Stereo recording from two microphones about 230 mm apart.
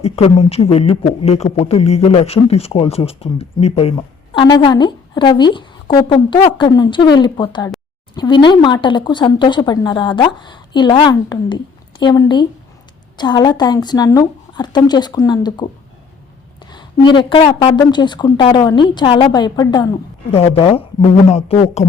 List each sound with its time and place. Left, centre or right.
0.0 s a woman's voice: left
16.7 s speech: centre